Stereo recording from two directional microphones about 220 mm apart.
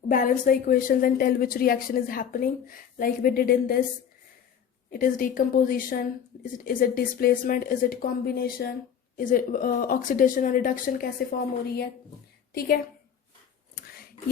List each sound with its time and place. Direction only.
0.1 s a woman's voice: 40° left (ahead or behind)
4.9 s a woman's voice: 40° left (ahead or behind)
12.5 s a woman's voice: 45° left (ahead or behind)
13.7 s a sound: 45° left (ahead or behind)